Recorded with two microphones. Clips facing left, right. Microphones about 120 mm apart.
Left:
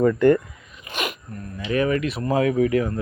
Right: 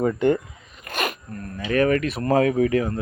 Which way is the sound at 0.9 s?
45° right (ahead or behind).